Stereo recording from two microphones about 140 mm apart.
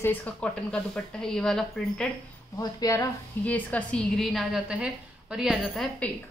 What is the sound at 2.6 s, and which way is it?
Speech, 25° left (ahead or behind).